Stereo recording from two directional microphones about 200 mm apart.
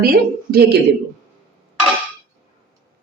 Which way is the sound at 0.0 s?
50° right (ahead or behind).